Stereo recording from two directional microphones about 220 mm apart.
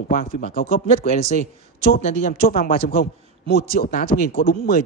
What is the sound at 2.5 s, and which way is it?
Speech, 45° left (ahead or behind).